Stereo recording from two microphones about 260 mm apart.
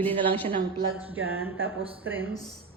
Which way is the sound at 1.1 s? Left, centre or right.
Centre.